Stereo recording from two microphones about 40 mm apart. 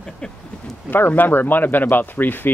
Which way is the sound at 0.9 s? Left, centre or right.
Left.